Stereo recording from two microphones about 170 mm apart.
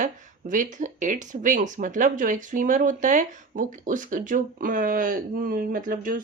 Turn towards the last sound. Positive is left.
turn(degrees=-55)  # may be behind; listen again after turning